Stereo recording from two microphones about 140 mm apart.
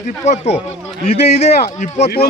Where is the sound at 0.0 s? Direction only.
50° left (ahead or behind).